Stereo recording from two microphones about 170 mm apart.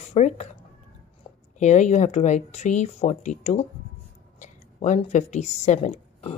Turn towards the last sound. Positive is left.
turn(degrees=40)  # may be behind; listen again after turning